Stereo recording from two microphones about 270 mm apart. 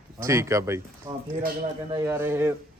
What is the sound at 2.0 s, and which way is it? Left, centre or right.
Speech, centre.